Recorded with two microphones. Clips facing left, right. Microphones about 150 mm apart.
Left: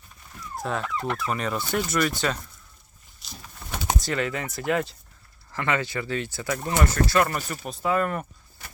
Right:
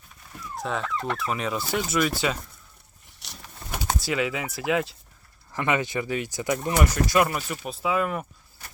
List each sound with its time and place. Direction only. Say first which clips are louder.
0.5 s speech: even; centre (ahead or behind)
3.2 s a sound: left 1 dB; 70° right (ahead or behind)
4.0 s speech: right 1 dB; 5° right (ahead or behind)
5.5 s speech: right 1 dB; 15° right (ahead or behind)